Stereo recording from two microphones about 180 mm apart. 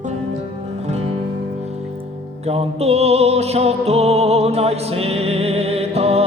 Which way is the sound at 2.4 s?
35° right (ahead or behind).